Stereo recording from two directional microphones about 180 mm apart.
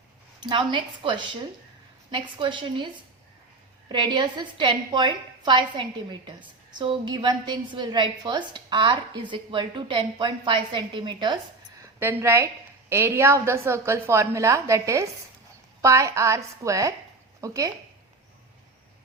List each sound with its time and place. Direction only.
0.4 s a woman's voice: 25° right (ahead or behind)
11.9 s a woman's voice: 15° right (ahead or behind)